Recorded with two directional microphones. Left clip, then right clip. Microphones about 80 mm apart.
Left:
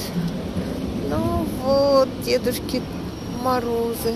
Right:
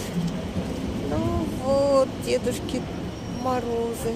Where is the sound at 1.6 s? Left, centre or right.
Centre.